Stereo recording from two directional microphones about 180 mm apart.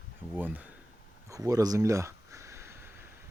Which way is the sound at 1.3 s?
20° right (ahead or behind).